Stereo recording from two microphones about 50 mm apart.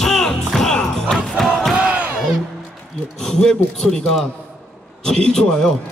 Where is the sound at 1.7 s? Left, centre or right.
Right.